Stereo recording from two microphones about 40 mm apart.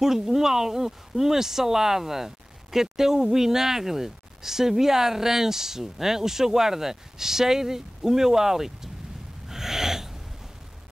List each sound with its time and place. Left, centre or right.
0.0 s speech: centre
9.5 s snort: centre